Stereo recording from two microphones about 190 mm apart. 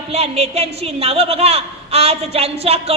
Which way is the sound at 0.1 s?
35° right (ahead or behind).